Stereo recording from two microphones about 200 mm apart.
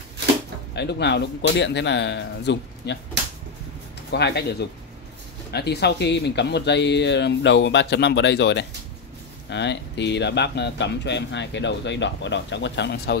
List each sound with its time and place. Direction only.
0.7 s speech: 55° left (ahead or behind)
4.1 s speech: 55° left (ahead or behind)